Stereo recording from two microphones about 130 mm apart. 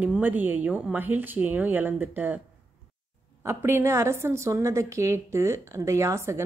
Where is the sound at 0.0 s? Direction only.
10° right (ahead or behind).